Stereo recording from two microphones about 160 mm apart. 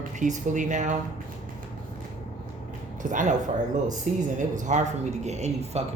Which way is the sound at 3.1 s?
50° right (ahead or behind).